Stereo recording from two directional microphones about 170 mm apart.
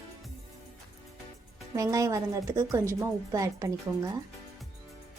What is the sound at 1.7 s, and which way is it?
A woman's voice, 20° right (ahead or behind).